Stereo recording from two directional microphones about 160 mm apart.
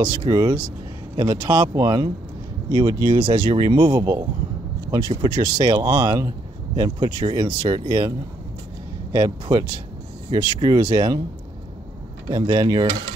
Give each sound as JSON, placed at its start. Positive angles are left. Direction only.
{"t": 0.0, "sound": "speech", "side_deg": -30}
{"t": 9.1, "sound": "speech", "side_deg": -25}
{"t": 12.3, "sound": "speech", "side_deg": -25}